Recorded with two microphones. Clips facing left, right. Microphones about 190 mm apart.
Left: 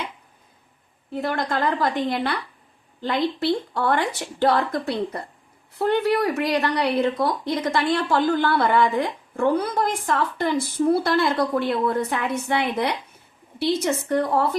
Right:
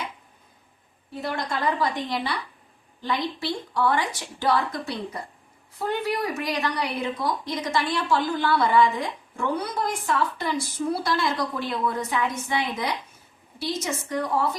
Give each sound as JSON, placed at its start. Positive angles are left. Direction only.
{"t": 1.1, "sound": "a woman's voice", "side_deg": 50}
{"t": 3.4, "sound": "a woman's voice", "side_deg": 60}